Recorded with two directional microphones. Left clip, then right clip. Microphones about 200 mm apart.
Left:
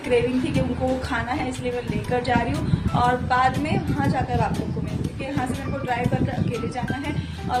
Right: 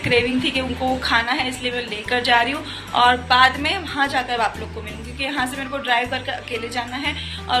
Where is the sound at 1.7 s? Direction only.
Centre (ahead or behind).